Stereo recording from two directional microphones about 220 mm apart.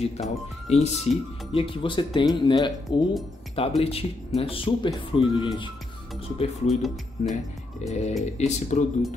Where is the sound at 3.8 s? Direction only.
25° left (ahead or behind).